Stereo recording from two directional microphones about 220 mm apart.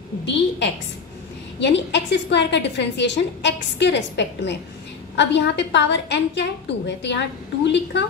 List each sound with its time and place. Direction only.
1.6 s a woman's voice: 55° left (ahead or behind)